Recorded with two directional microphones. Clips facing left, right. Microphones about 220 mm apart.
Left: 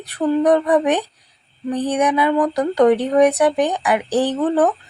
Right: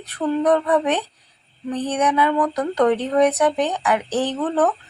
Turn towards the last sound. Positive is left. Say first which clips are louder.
# left 3 dB
turn(degrees=15)  # may be behind; listen again after turning